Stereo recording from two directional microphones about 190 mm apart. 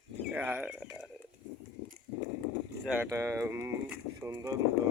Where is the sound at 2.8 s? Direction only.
10° right (ahead or behind).